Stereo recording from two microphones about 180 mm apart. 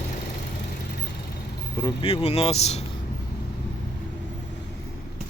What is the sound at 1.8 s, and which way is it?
Speech, 30° left (ahead or behind).